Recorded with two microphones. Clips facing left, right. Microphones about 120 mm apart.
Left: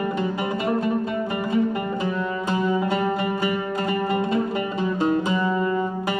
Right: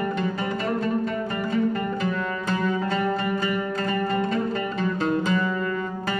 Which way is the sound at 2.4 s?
15° left (ahead or behind).